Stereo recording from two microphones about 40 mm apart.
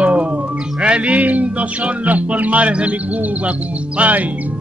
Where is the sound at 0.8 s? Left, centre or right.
Right.